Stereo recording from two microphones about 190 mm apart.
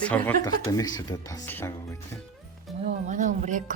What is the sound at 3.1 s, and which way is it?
Speech, 40° right (ahead or behind).